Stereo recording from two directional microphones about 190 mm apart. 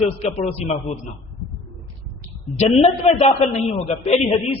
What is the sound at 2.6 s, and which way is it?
A man's voice, 35° left (ahead or behind).